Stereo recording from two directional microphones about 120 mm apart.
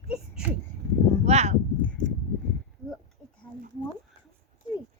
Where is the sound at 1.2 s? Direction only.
65° right (ahead or behind).